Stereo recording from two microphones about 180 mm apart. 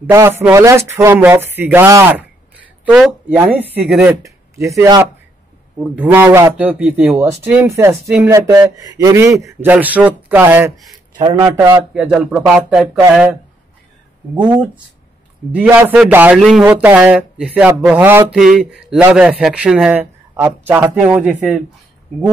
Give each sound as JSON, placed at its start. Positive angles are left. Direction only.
{"t": 0.0, "sound": "a man's voice", "side_deg": -15}
{"t": 4.2, "sound": "a man's voice", "side_deg": -15}
{"t": 11.1, "sound": "a man's voice", "side_deg": -25}
{"t": 11.9, "sound": "speech", "side_deg": -5}
{"t": 15.5, "sound": "a man's voice", "side_deg": -10}